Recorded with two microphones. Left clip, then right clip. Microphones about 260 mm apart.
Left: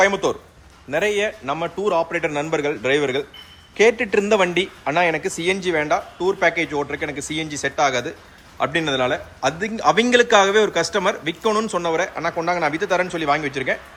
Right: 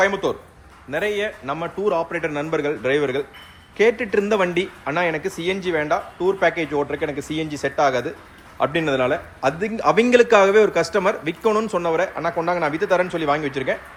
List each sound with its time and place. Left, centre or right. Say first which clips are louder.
0.0 s a man's voice: left 2 dB; centre